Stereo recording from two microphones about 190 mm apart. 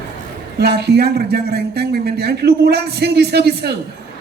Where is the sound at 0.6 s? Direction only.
60° right (ahead or behind).